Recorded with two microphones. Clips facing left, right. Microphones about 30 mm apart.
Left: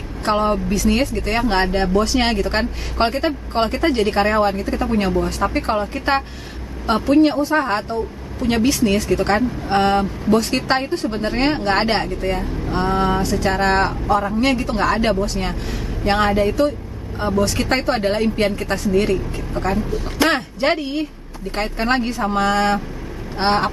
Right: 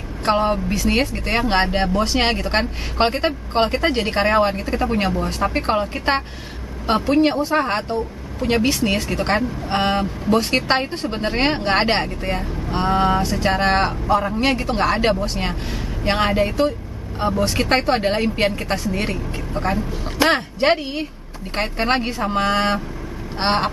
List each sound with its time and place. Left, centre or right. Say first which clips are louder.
0.2 s speech: even; centre